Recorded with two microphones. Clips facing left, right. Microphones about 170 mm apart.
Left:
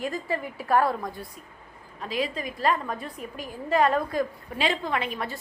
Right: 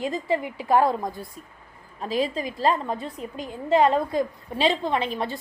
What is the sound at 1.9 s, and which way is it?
A woman's voice, 30° right (ahead or behind).